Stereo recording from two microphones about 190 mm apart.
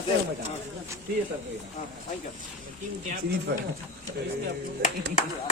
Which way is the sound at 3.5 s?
55° right (ahead or behind).